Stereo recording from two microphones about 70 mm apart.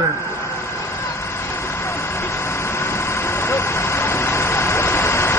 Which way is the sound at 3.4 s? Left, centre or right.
Left.